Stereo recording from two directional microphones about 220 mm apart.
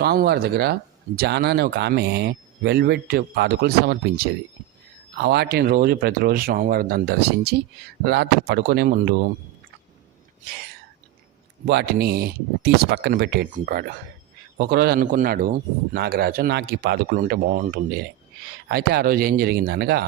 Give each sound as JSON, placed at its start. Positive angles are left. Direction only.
{"t": 0.0, "sound": "speech", "side_deg": -45}
{"t": 11.6, "sound": "speech", "side_deg": -50}